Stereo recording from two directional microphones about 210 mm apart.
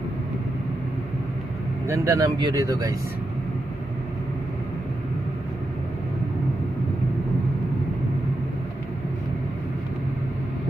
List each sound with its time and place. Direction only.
1.9 s speech: 15° right (ahead or behind)